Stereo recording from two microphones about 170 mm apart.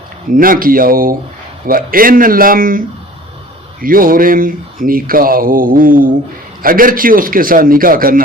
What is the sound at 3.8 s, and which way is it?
Mantra, 55° right (ahead or behind).